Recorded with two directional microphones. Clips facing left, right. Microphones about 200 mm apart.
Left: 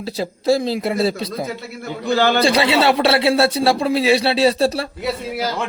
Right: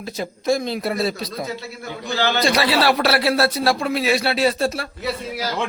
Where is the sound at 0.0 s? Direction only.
30° left (ahead or behind).